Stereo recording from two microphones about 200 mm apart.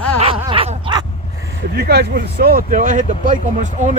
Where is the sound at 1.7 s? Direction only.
50° right (ahead or behind).